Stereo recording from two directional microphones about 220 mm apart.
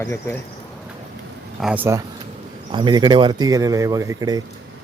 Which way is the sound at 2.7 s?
20° right (ahead or behind).